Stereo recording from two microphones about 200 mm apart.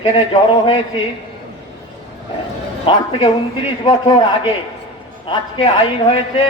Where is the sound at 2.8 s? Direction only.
25° left (ahead or behind).